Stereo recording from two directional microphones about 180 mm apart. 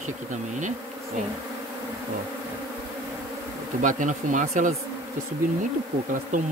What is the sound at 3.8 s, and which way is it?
Bee, 45° right (ahead or behind).